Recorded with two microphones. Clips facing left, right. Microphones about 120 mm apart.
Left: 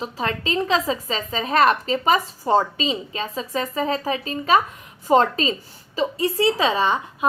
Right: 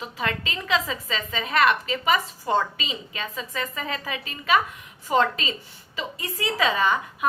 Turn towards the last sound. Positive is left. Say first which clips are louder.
# left 2 dB
turn(degrees=30)  # may be behind; listen again after turning